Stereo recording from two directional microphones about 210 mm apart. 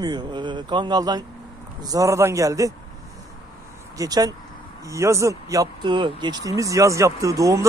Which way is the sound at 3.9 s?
15° right (ahead or behind).